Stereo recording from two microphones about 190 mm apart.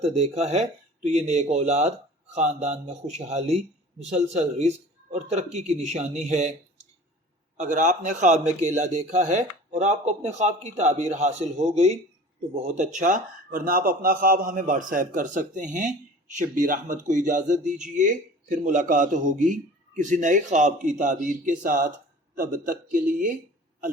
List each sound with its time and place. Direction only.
0.0 s a man's voice: 35° right (ahead or behind)